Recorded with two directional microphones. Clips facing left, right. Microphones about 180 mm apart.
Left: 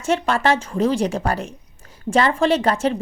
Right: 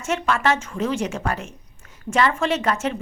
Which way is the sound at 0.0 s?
35° left (ahead or behind).